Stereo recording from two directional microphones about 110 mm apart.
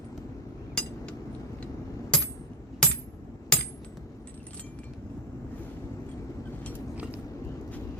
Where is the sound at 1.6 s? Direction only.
10° left (ahead or behind).